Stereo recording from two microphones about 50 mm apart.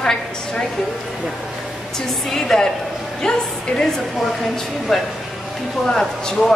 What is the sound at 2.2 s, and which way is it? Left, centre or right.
Speech, centre.